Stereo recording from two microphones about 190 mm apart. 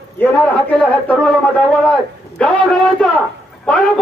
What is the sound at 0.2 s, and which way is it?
A man's voice, 10° left (ahead or behind).